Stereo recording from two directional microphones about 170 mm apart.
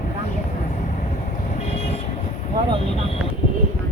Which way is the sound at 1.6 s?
40° left (ahead or behind).